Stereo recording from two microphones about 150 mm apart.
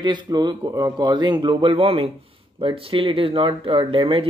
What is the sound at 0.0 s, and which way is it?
Speech, 30° right (ahead or behind).